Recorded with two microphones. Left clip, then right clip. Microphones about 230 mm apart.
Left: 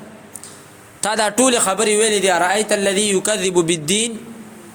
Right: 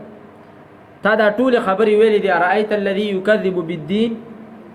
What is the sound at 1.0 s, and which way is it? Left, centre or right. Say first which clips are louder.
A man's voice: right 2 dB; left.